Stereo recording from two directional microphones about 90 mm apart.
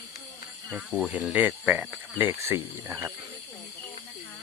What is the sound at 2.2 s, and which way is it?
Speech, 25° right (ahead or behind).